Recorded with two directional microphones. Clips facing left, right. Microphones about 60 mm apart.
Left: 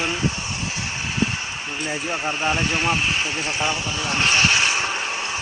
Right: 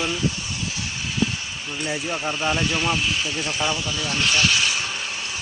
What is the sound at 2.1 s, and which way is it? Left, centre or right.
Speech, centre.